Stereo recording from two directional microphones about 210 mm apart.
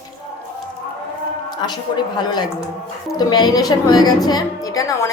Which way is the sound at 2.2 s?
20° left (ahead or behind).